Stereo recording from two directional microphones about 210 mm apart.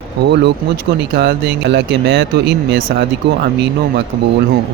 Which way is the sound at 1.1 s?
50° right (ahead or behind).